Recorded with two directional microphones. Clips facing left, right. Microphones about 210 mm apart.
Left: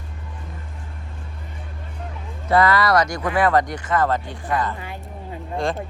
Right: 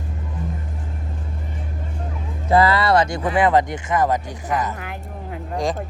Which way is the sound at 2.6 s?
30° right (ahead or behind).